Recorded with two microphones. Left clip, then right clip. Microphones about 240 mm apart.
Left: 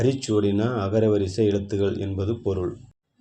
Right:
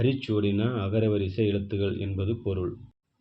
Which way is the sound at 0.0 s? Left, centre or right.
Left.